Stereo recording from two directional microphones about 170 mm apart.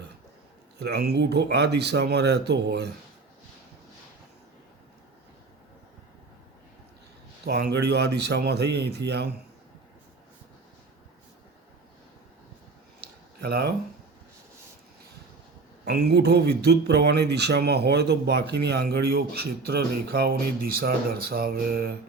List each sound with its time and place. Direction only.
0.8 s speech: 75° right (ahead or behind)
7.4 s speech: 75° right (ahead or behind)
13.0 s a sound: 65° right (ahead or behind)
15.8 s speech: 75° right (ahead or behind)